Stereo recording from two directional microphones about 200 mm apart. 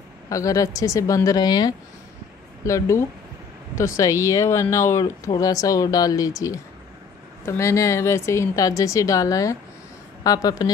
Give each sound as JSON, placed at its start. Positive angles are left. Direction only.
{"t": 0.3, "sound": "speech", "side_deg": 15}